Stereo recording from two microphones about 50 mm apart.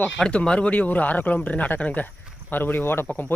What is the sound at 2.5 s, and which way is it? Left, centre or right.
Speech, left.